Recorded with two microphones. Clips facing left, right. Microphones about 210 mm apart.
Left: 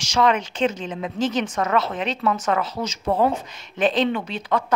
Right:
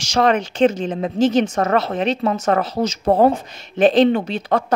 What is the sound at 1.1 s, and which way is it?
Speech, 25° right (ahead or behind).